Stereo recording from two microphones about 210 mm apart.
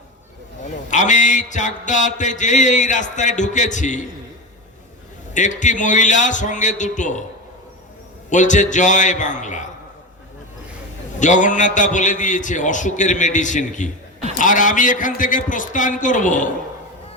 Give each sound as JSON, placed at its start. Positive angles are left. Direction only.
{"t": 0.7, "sound": "a man's voice", "side_deg": 35}
{"t": 5.3, "sound": "a man's voice", "side_deg": 35}
{"t": 8.3, "sound": "a man's voice", "side_deg": 35}
{"t": 11.2, "sound": "a man's voice", "side_deg": 35}